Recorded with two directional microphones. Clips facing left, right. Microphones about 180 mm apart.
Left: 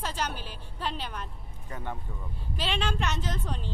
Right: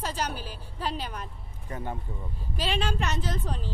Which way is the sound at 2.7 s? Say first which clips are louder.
Right 1 dB; 5° right (ahead or behind).